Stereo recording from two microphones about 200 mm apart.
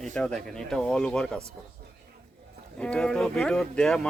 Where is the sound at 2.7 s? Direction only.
5° left (ahead or behind).